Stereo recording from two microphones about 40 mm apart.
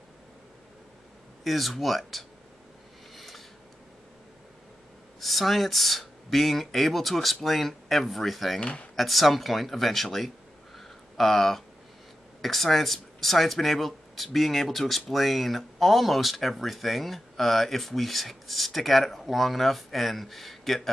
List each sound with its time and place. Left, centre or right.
1.4 s speech: centre
3.2 s a sound: centre
5.2 s speech: centre
8.5 s speech: left
8.9 s speech: centre
10.8 s a sound: centre
12.4 s speech: centre